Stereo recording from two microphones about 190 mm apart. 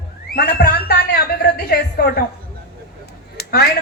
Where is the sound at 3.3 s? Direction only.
55° left (ahead or behind).